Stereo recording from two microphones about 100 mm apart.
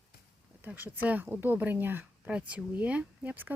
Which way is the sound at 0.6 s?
20° right (ahead or behind).